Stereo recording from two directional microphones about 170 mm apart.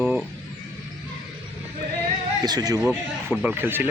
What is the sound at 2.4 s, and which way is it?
Speech, 25° right (ahead or behind).